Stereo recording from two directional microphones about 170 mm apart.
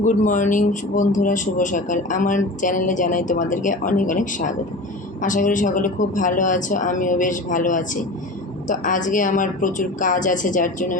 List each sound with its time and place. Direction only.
0.0 s speech: 50° left (ahead or behind)